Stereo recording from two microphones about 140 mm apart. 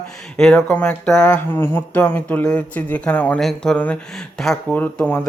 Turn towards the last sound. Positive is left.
turn(degrees=10)  # may be behind; listen again after turning